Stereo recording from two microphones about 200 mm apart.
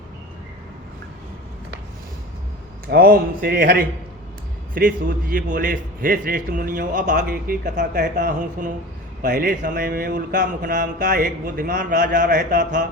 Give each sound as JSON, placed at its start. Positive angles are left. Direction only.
{"t": 2.9, "sound": "a man's voice", "side_deg": -50}